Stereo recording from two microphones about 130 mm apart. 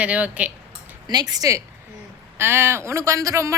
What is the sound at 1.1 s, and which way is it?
Speech, 30° right (ahead or behind).